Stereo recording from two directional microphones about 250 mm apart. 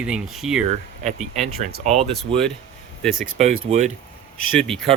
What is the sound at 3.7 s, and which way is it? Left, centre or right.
Speech, right.